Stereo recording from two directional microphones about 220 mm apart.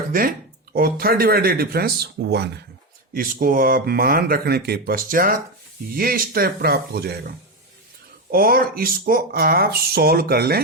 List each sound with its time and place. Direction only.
0.1 s speech: 40° right (ahead or behind)